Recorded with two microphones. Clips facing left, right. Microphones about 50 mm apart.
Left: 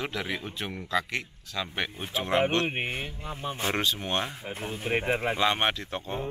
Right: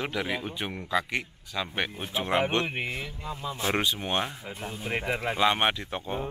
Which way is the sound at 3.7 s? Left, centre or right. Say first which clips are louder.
Right 2 dB; centre.